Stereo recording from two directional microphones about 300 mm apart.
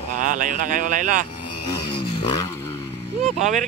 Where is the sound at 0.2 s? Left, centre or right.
Right.